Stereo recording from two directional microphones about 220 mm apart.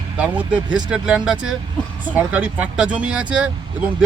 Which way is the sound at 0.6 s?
20° right (ahead or behind).